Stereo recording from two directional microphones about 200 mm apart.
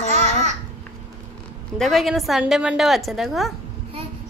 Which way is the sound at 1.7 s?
Centre (ahead or behind).